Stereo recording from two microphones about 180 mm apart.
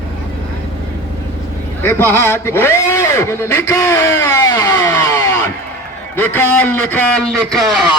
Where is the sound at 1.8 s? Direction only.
10° left (ahead or behind).